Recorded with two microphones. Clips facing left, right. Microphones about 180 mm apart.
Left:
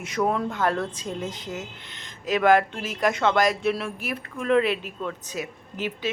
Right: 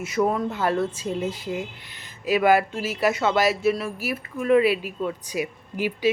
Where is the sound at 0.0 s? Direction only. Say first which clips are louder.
Right 2 dB; 5° right (ahead or behind).